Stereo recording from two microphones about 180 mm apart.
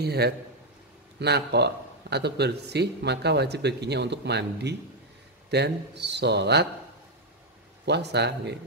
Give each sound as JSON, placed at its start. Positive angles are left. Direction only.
{"t": 0.0, "sound": "a man's voice", "side_deg": -65}
{"t": 7.8, "sound": "speech", "side_deg": -70}